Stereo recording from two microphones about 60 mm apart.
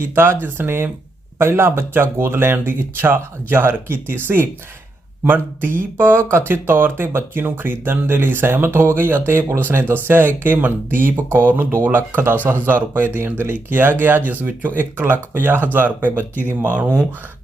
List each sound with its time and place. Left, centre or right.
0.1 s speech: right